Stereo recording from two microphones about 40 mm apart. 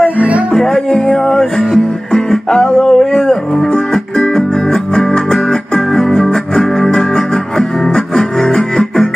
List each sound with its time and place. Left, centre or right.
0.6 s music: centre